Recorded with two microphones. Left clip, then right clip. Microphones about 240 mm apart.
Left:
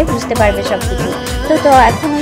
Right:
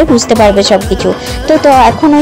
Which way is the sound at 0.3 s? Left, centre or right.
Right.